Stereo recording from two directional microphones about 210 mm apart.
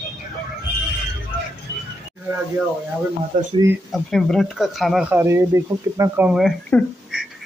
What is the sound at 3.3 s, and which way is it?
Speech, 40° right (ahead or behind).